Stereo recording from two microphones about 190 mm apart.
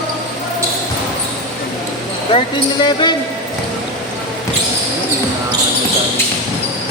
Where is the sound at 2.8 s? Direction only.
20° left (ahead or behind).